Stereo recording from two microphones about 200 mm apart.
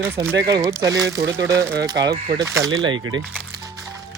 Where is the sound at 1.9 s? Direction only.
55° right (ahead or behind).